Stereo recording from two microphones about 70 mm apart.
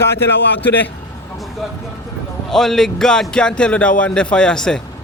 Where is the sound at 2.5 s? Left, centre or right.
Centre.